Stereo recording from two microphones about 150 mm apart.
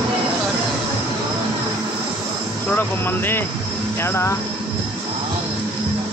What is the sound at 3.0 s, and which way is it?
Speech, 15° left (ahead or behind).